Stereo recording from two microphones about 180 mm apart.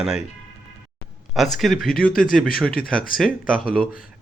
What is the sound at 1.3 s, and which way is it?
Speech, centre (ahead or behind).